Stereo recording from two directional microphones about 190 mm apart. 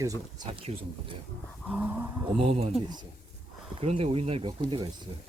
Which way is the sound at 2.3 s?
30° right (ahead or behind).